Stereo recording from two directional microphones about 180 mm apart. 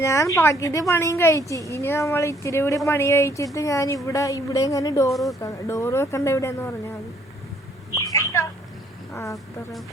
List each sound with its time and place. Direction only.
0.0 s speech: 15° left (ahead or behind)
5.1 s speech: centre (ahead or behind)
5.4 s speech: 20° left (ahead or behind)
7.9 s a sound: 15° left (ahead or behind)
9.1 s speech: 15° left (ahead or behind)